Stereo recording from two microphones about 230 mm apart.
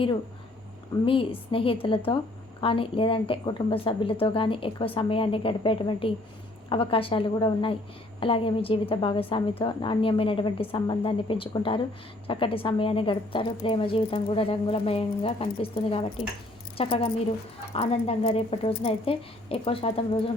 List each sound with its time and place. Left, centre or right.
1.0 s a woman's voice: left